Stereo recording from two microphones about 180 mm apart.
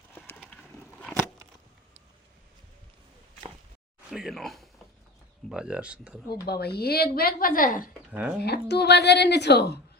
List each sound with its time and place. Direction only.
0.3 s a sound: 5° left (ahead or behind)
4.1 s speech: centre (ahead or behind)
6.2 s speech: 25° left (ahead or behind)
6.5 s a woman's voice: 60° left (ahead or behind)
8.4 s a woman's voice: 65° left (ahead or behind)